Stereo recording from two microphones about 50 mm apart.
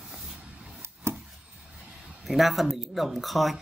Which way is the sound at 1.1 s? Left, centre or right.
Right.